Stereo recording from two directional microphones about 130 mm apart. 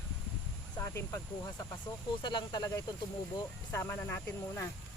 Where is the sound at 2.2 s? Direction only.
35° left (ahead or behind); by 4.6 s 20° left (ahead or behind).